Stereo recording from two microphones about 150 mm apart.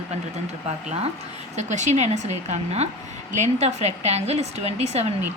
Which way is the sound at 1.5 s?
50° right (ahead or behind).